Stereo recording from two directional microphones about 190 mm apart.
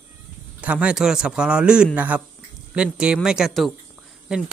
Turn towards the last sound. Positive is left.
turn(degrees=-5)  # may be behind; listen again after turning